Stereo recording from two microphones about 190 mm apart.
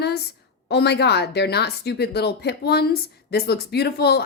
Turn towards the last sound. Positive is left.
turn(degrees=55)  # may be behind; listen again after turning